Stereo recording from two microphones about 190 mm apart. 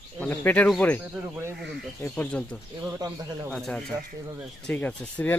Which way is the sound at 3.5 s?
Centre (ahead or behind).